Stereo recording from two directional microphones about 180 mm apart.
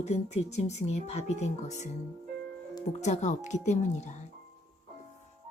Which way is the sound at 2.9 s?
40° left (ahead or behind).